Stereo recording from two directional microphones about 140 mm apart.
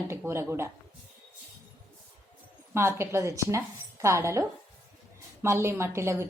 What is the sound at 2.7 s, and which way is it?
A woman's voice, 20° right (ahead or behind).